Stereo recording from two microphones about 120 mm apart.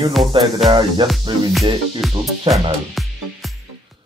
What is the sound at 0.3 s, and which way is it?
Speech, 45° right (ahead or behind).